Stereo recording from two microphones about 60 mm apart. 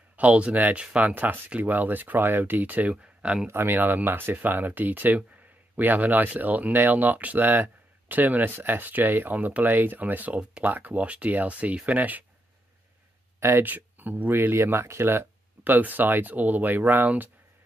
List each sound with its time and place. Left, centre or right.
0.2 s speech: right
3.4 s speech: right
13.4 s speech: right
13.7 s speech: right